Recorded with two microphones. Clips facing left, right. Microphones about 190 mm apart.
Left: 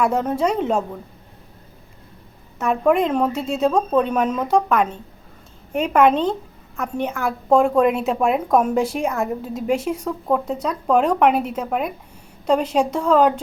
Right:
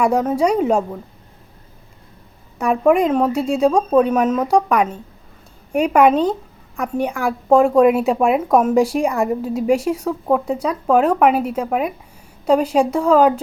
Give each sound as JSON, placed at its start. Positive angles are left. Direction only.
{"t": 0.0, "sound": "a woman's voice", "side_deg": -10}
{"t": 2.6, "sound": "a woman's voice", "side_deg": -10}